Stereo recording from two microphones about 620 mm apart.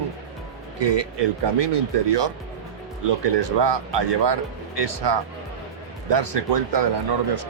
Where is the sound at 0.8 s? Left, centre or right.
Right.